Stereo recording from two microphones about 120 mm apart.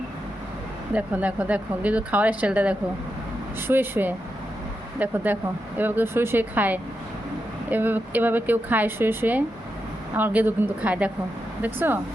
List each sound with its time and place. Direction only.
0.9 s a woman's voice: 10° right (ahead or behind)